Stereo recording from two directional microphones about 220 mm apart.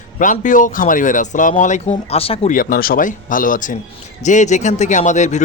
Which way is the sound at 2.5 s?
40° left (ahead or behind).